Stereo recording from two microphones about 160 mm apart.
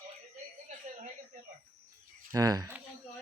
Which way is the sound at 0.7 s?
50° right (ahead or behind).